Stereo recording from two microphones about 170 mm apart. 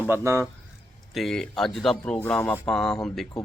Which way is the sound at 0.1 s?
15° right (ahead or behind).